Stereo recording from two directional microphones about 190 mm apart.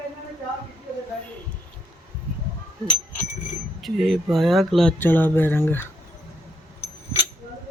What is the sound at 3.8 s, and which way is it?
Speech, centre (ahead or behind).